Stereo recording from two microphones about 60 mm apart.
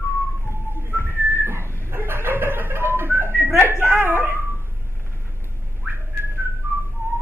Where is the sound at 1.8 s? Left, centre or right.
Right.